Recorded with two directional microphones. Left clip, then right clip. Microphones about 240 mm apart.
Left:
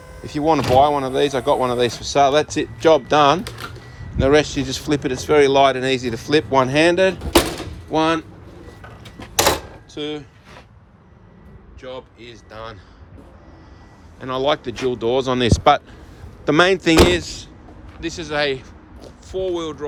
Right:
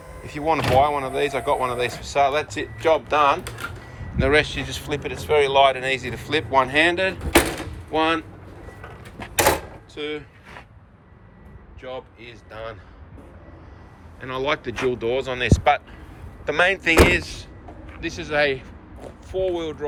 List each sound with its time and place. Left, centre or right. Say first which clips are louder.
0.3 s speech: left 4 dB; centre
9.9 s a sound: left 2 dB; centre
11.8 s speech: left 1 dB; centre
14.2 s speech: left 5 dB; centre
17.2 s speech: left 1 dB; centre